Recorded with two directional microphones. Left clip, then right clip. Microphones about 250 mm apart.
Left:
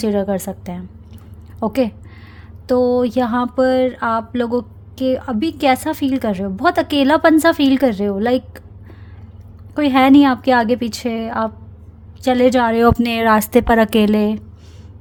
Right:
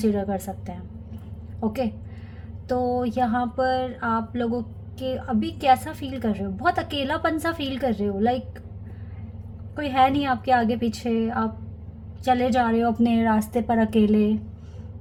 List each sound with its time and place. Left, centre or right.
0.0 s a woman's voice: left
2.6 s a woman's voice: left
9.7 s a woman's voice: left